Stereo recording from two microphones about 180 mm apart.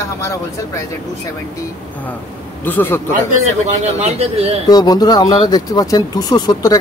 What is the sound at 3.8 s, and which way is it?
Speech, 35° right (ahead or behind).